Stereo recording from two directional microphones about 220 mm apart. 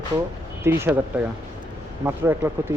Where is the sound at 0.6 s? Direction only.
10° right (ahead or behind).